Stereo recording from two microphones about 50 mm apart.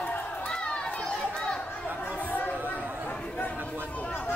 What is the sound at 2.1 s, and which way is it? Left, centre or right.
Chatter, left.